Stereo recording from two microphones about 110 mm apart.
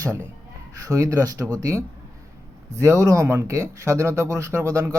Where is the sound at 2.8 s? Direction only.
30° right (ahead or behind).